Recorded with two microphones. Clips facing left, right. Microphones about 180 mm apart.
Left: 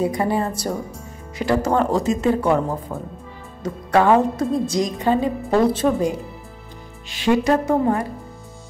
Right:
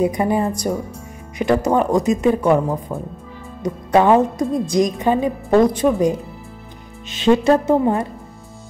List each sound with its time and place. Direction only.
0.0 s a woman's voice: 20° right (ahead or behind)